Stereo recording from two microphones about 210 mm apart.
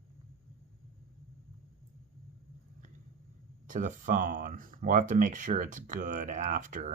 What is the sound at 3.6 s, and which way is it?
Speech, 40° right (ahead or behind).